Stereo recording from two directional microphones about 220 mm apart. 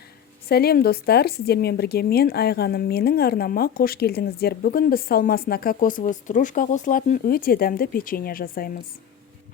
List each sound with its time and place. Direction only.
0.4 s a woman's voice: 45° left (ahead or behind)